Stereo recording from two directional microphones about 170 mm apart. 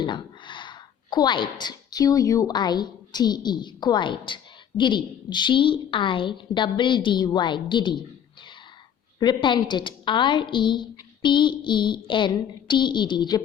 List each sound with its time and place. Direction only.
0.0 s a woman's voice: 30° left (ahead or behind)
9.1 s a woman's voice: 25° left (ahead or behind)